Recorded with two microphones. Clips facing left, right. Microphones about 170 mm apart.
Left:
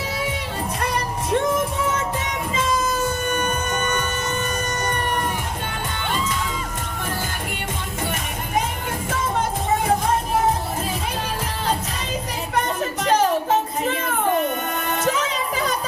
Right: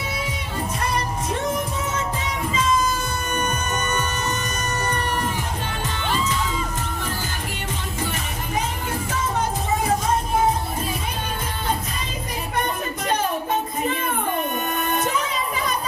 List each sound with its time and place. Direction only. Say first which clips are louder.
13.0 s music: left 6 dB; 80° left
14.9 s music: left 3 dB; 90° left